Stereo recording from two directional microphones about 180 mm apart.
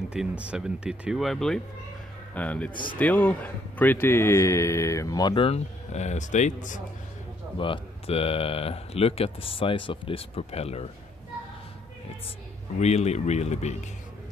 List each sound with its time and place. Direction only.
0.1 s a man's voice: 5° right (ahead or behind); by 6.8 s 45° left (ahead or behind)
7.5 s speech: 30° left (ahead or behind)
12.8 s speech: 40° left (ahead or behind)